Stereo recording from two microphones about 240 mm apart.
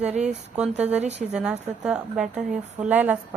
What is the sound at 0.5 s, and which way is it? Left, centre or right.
Speech, centre.